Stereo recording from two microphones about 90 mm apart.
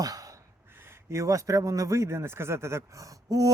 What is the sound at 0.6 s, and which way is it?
A man's voice, 25° right (ahead or behind).